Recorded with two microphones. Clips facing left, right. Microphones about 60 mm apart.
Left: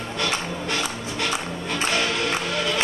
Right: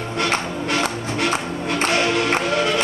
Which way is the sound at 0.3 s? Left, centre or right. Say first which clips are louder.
Right 4 dB; right.